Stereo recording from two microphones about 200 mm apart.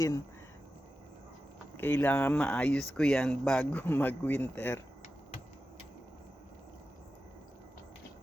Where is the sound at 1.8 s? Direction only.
10° left (ahead or behind).